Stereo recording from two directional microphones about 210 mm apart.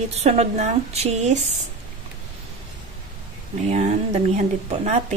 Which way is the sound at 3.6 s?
35° right (ahead or behind).